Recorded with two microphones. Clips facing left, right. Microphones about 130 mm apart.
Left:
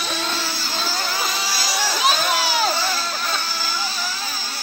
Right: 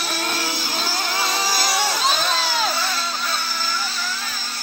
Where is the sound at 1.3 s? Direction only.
45° right (ahead or behind).